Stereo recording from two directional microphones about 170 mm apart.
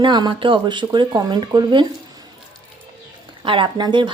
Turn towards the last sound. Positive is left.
turn(degrees=-25)  # may be behind; listen again after turning